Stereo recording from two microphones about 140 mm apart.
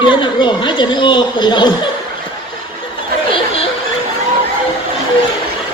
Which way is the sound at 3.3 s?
45° left (ahead or behind).